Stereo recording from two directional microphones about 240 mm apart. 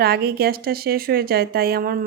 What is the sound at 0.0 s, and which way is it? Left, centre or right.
Speech, right.